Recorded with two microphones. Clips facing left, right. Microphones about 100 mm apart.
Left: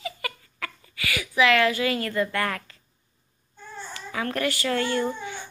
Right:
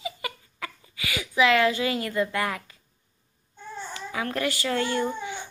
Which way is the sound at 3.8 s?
15° right (ahead or behind).